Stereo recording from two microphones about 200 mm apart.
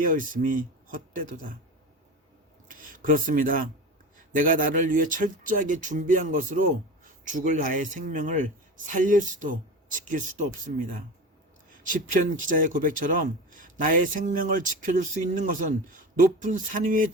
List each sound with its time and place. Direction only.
0.0 s speech: 40° right (ahead or behind)
2.6 s a man's voice: 45° right (ahead or behind)
12.5 s a man's voice: 40° right (ahead or behind)